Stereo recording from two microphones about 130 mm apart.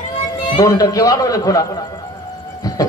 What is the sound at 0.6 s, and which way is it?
A man's voice, 25° left (ahead or behind).